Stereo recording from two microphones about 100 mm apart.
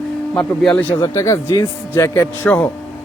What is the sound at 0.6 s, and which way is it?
Speech, 10° left (ahead or behind).